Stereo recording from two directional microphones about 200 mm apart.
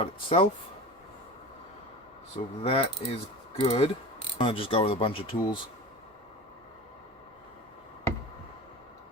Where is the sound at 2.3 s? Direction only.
30° left (ahead or behind).